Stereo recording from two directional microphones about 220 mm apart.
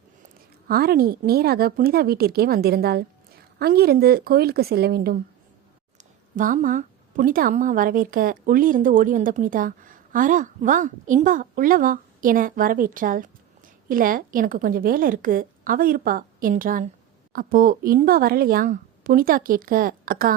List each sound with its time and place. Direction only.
0.7 s a woman's voice: 45° right (ahead or behind)